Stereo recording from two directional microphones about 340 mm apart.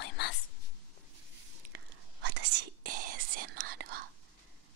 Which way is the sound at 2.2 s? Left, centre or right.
Right.